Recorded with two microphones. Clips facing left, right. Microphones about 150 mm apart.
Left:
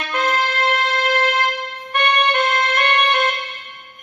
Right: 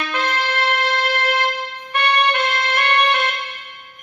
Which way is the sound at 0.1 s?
45° left (ahead or behind).